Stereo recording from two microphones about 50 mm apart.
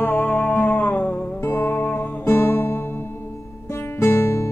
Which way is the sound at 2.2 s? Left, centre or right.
Left.